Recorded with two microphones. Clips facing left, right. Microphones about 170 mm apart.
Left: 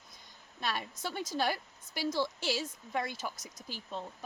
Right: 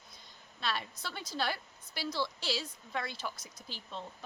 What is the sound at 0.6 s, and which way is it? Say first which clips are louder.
A woman's voice: left 1 dB; 45° left (ahead or behind).